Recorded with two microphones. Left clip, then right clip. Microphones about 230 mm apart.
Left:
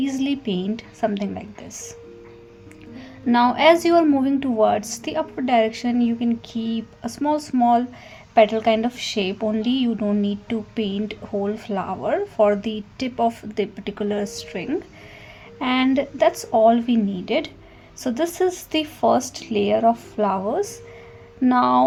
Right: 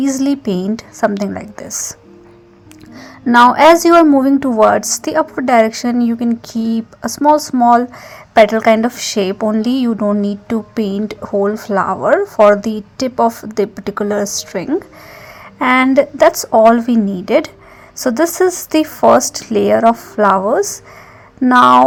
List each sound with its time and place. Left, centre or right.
0.0 s speech: right
3.3 s speech: right
3.9 s a woman's voice: centre
4.2 s speech: right
6.1 s speech: right
6.5 s speech: right